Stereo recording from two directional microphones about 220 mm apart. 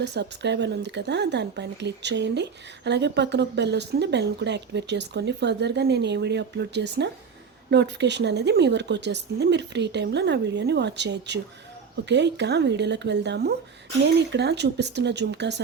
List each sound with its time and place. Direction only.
0.0 s speech: 50° right (ahead or behind)